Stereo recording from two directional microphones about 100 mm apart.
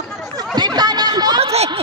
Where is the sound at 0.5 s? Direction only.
45° right (ahead or behind).